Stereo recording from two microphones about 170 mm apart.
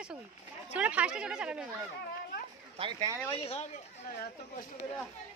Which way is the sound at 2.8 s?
20° right (ahead or behind).